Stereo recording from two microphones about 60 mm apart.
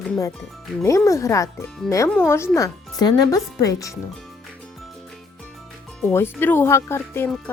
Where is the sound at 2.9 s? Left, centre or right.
Left.